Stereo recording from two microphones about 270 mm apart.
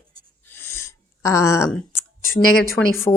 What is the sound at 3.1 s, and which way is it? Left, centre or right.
Speech, centre.